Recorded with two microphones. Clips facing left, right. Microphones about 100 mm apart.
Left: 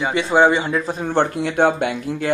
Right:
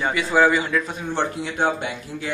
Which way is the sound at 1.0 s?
55° left (ahead or behind).